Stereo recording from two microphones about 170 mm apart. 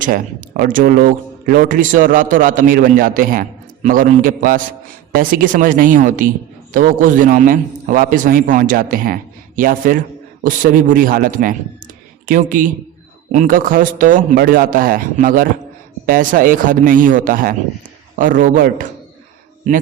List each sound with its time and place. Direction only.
0.0 s a man's voice: 50° right (ahead or behind)